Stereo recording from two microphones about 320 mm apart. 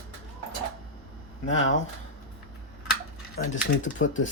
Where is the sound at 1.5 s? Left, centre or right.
Left.